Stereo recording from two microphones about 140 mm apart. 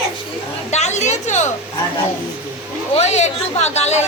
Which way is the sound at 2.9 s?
55° left (ahead or behind).